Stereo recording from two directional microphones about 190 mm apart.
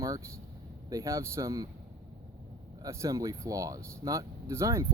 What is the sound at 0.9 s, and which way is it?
Speech, 15° right (ahead or behind).